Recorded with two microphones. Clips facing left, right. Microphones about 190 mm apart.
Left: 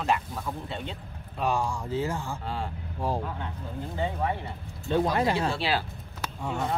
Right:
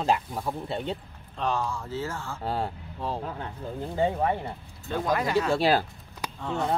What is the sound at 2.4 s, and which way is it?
Speech, 40° right (ahead or behind).